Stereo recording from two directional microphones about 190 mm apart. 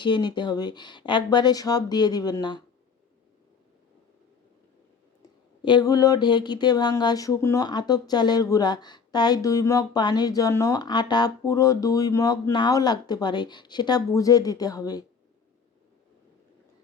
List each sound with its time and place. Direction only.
0.0 s speech: 25° left (ahead or behind)
5.6 s speech: 20° left (ahead or behind)